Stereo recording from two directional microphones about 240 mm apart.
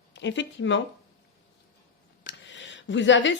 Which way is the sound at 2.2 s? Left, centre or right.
Left.